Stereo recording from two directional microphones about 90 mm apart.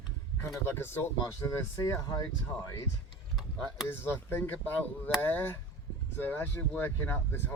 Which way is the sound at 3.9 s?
25° left (ahead or behind).